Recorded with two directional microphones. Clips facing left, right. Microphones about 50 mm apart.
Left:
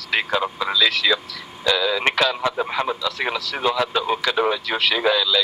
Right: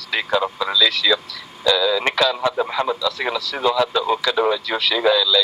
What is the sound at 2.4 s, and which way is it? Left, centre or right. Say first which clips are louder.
Speech: right 2 dB; centre.